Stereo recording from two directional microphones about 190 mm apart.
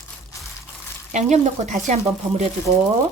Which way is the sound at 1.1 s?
40° right (ahead or behind).